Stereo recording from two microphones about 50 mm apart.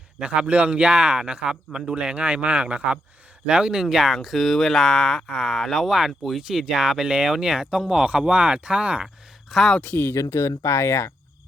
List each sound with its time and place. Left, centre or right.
0.2 s a man's voice: right
9.5 s speech: centre
9.8 s speech: left
10.1 s speech: left